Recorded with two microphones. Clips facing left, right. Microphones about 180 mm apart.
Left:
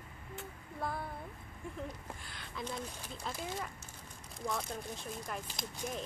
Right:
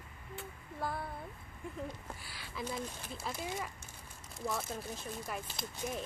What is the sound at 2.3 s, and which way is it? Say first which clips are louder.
Speech: right 1 dB; 5° right (ahead or behind).